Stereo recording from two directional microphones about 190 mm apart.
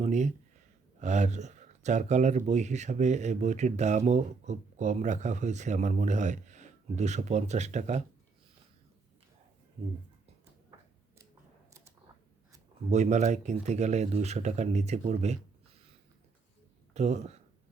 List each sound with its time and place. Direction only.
0.0 s speech: 40° right (ahead or behind)
12.9 s speech: 40° right (ahead or behind)
16.9 s speech: 35° right (ahead or behind)